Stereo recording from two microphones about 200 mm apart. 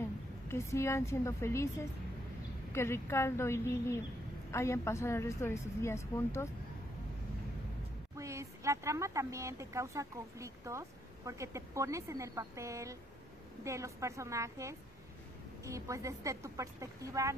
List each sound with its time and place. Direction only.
0.5 s a woman's voice: 15° left (ahead or behind)
8.2 s speech: 15° right (ahead or behind)